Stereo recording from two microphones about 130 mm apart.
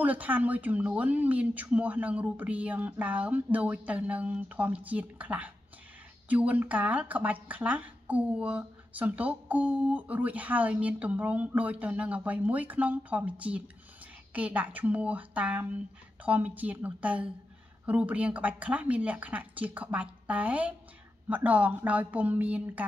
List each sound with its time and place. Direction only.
0.0 s speech: 10° right (ahead or behind)